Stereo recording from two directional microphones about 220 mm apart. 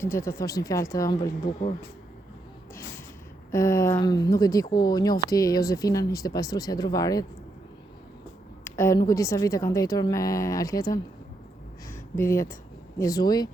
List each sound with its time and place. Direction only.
0.0 s a woman's voice: 10° left (ahead or behind)
3.5 s a woman's voice: 15° left (ahead or behind)
8.6 s a woman's voice: 10° left (ahead or behind)